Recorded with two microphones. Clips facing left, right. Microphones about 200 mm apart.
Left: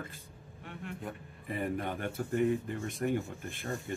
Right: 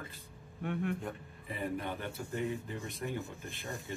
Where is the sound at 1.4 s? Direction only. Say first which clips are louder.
Left 3 dB; 50° left (ahead or behind).